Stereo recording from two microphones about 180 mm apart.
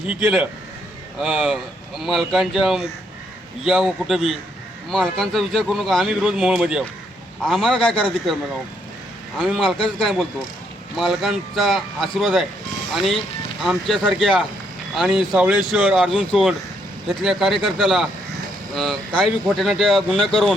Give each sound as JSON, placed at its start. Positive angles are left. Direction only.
{"t": 0.1, "sound": "speech", "side_deg": 0}
{"t": 9.4, "sound": "speech", "side_deg": 0}